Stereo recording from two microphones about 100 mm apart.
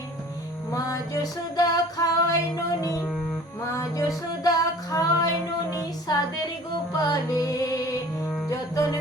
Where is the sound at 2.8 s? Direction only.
35° left (ahead or behind).